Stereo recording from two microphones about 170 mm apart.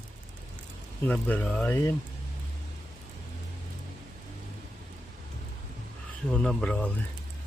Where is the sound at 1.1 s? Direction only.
10° left (ahead or behind).